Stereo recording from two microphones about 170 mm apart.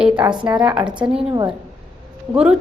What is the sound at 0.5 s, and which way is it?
Speech, 25° right (ahead or behind).